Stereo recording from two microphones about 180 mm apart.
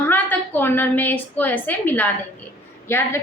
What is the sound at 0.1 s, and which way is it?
A woman's voice, 10° left (ahead or behind).